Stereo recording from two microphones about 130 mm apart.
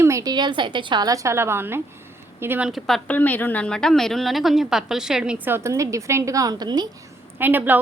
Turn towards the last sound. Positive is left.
turn(degrees=-15)  # may be behind; listen again after turning